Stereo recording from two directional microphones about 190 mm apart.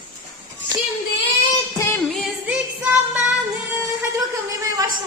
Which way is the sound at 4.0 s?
15° right (ahead or behind).